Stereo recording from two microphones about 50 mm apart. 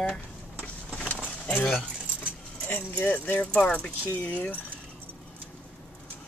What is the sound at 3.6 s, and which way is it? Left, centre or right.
Speech, left.